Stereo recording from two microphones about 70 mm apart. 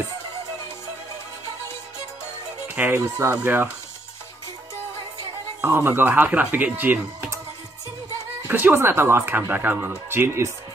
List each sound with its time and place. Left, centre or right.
2.9 s speech: right
5.6 s speech: right
8.5 s speech: right